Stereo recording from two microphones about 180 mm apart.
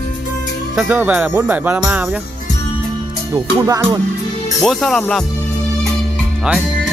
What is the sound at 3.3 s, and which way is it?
Music, 20° right (ahead or behind).